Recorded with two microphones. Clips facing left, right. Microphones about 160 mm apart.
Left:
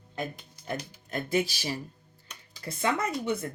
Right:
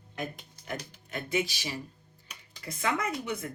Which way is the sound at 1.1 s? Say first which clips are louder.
Left 3 dB; 40° left (ahead or behind).